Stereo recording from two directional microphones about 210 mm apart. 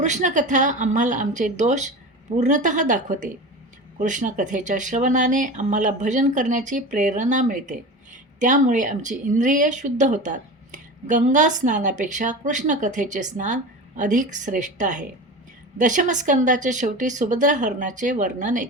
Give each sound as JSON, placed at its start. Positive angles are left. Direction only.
{"t": 0.0, "sound": "speech", "side_deg": -35}